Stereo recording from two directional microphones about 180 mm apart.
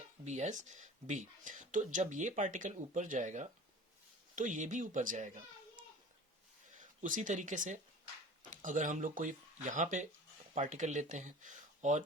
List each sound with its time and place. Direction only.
0.3 s speech: 40° right (ahead or behind)
7.0 s speech: 45° right (ahead or behind)